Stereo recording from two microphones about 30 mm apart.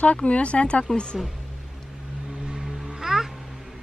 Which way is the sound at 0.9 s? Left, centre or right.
Left.